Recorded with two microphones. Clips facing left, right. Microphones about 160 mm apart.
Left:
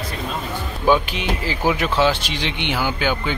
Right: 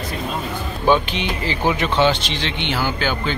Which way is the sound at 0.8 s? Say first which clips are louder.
Even; 5° left (ahead or behind).